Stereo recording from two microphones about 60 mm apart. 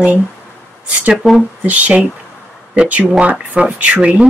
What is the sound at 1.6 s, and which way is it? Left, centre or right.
Speech, right.